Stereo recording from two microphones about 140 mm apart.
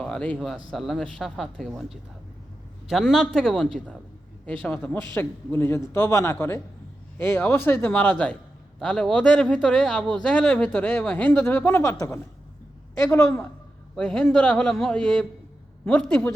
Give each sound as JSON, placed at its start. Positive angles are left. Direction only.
{"t": 0.0, "sound": "speech", "side_deg": 10}
{"t": 13.9, "sound": "speech", "side_deg": 5}